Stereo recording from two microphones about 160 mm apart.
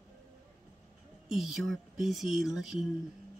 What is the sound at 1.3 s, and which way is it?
Speech, centre (ahead or behind).